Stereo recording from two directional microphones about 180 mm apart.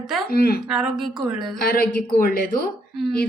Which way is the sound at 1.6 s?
55° left (ahead or behind).